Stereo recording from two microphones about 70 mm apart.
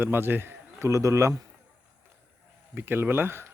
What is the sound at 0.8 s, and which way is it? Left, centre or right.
Speech, right.